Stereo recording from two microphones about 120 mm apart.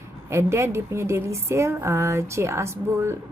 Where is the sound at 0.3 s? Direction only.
20° right (ahead or behind).